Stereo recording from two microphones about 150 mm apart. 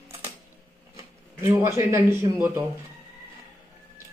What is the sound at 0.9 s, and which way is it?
Speech, 20° right (ahead or behind).